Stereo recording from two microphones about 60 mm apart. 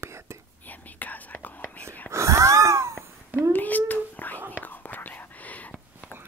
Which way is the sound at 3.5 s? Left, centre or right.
Left.